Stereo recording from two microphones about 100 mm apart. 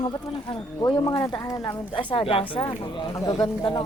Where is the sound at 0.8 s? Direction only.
35° left (ahead or behind).